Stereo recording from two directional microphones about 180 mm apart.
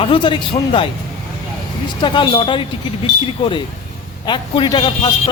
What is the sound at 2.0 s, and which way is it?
A man's voice, 25° left (ahead or behind).